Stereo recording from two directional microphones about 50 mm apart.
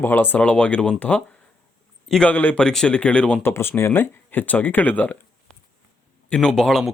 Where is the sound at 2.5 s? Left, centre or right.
Centre.